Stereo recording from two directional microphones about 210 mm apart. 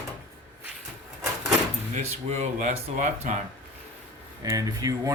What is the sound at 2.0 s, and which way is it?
Speech, 30° right (ahead or behind).